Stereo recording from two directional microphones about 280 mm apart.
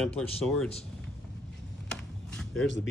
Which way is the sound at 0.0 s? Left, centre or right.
Centre.